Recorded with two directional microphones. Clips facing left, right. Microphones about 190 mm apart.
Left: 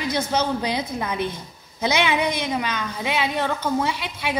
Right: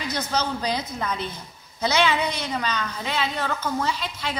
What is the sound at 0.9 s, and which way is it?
A woman's voice, 15° left (ahead or behind).